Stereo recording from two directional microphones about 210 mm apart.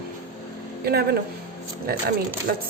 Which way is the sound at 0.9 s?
50° right (ahead or behind).